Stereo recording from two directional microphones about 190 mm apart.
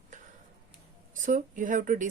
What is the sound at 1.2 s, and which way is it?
Speech, 45° right (ahead or behind).